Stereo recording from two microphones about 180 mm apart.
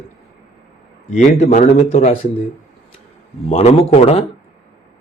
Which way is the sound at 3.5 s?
35° left (ahead or behind).